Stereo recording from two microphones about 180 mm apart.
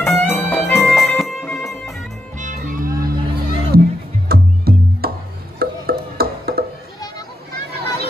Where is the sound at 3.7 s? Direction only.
55° right (ahead or behind).